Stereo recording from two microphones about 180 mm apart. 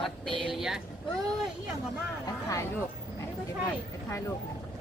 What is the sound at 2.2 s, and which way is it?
Speech, 20° left (ahead or behind).